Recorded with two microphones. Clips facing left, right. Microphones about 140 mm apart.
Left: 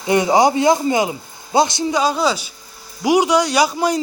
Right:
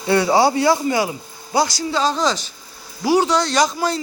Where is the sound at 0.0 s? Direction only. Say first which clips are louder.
Left 1 dB; 20° left (ahead or behind).